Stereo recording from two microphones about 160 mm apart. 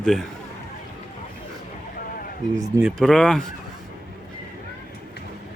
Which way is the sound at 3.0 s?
5° left (ahead or behind).